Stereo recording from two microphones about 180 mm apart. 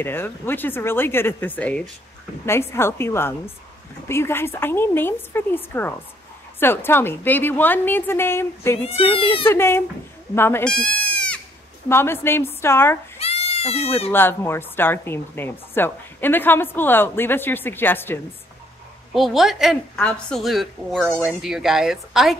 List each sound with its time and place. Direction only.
0.0 s speech: 10° left (ahead or behind)
8.8 s speech: 30° left (ahead or behind)
9.5 s speech: 15° left (ahead or behind)
10.3 s goat: 10° left (ahead or behind)
11.9 s speech: 15° left (ahead or behind)
13.2 s goat: 35° left (ahead or behind)
14.1 s speech: 10° left (ahead or behind)
19.1 s a woman's voice: centre (ahead or behind)